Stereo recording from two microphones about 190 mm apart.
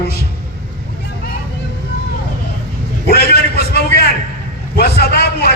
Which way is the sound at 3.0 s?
55° left (ahead or behind).